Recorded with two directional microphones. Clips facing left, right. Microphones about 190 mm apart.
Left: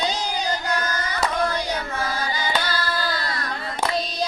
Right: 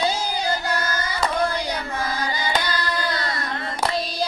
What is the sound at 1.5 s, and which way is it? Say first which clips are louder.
Carnatic music: even; 10° right (ahead or behind).